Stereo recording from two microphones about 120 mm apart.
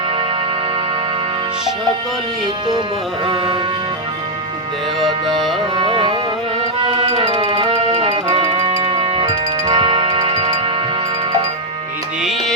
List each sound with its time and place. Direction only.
3.2 s music: 45° right (ahead or behind)
5.7 s music: 45° right (ahead or behind)
9.6 s music: 45° right (ahead or behind)
12.2 s music: centre (ahead or behind)